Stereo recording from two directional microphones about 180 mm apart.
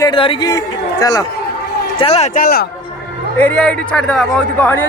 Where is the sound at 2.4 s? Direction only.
60° left (ahead or behind).